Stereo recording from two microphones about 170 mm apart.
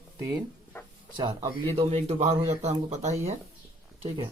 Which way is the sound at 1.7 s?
35° right (ahead or behind).